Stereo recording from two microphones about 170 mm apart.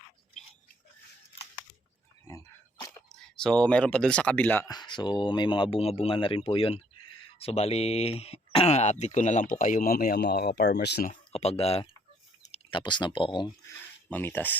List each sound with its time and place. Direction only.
2.2 s a sound: 15° left (ahead or behind)
3.3 s speech: 5° left (ahead or behind)
4.7 s speech: 25° left (ahead or behind); by 11.1 s 70° left (ahead or behind)
11.1 s speech: 35° left (ahead or behind)
14.1 s speech: 10° left (ahead or behind)